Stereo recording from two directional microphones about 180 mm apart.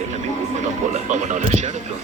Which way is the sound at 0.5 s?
40° right (ahead or behind).